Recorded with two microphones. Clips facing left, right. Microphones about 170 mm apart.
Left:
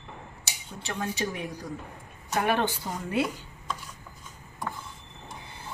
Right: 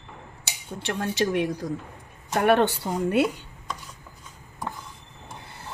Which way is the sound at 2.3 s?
65° right (ahead or behind).